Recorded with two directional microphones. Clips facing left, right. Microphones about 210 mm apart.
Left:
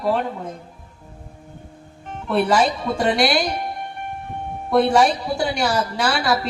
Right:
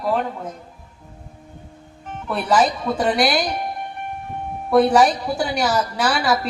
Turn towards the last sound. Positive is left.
turn(degrees=-5)  # may be behind; listen again after turning